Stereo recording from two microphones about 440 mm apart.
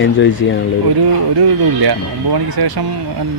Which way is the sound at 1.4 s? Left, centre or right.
Right.